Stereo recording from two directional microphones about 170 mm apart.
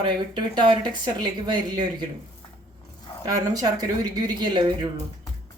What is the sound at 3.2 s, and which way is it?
A woman's voice, 20° right (ahead or behind).